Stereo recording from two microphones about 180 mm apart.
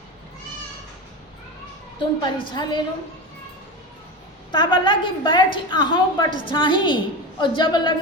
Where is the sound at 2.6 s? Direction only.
25° left (ahead or behind).